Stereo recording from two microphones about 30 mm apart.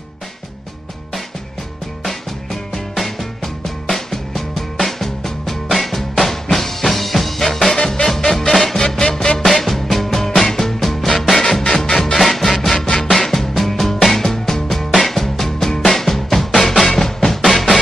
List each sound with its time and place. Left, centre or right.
2.0 s music: centre
8.7 s music: left
9.4 s music: centre
12.8 s music: left
13.1 s music: centre